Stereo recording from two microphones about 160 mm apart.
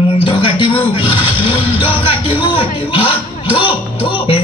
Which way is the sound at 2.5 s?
35° left (ahead or behind).